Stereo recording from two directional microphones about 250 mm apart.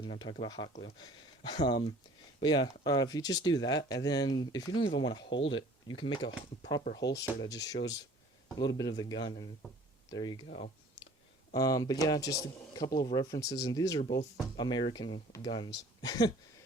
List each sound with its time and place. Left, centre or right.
0.0 s speech: centre
6.8 s speech: left
7.3 s speech: centre